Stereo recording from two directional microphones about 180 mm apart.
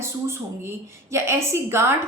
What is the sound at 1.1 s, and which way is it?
Speech, 15° right (ahead or behind).